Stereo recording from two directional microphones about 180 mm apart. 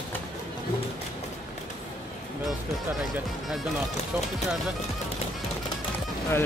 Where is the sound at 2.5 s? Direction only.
Centre (ahead or behind).